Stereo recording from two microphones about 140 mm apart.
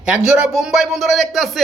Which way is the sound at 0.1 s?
5° right (ahead or behind).